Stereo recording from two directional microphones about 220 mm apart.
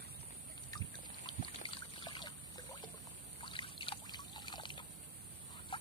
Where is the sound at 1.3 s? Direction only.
20° left (ahead or behind).